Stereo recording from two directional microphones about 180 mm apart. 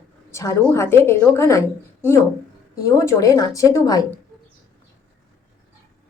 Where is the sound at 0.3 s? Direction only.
15° left (ahead or behind).